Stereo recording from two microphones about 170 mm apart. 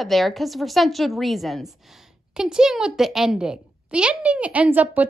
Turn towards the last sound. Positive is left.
turn(degrees=-10)  # may be behind; listen again after turning